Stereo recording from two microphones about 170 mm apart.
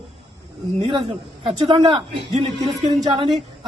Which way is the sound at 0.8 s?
35° right (ahead or behind).